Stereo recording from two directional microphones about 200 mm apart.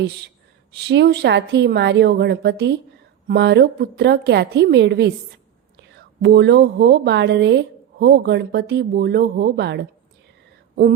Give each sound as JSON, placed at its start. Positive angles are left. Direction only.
{"t": 0.9, "sound": "a woman's voice", "side_deg": -60}